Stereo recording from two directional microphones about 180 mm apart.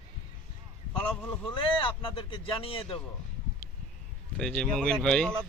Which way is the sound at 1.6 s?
30° left (ahead or behind).